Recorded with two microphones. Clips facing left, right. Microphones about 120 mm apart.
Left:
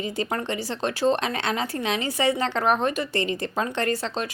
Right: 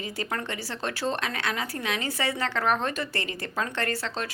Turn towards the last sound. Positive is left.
turn(degrees=20)  # may be behind; listen again after turning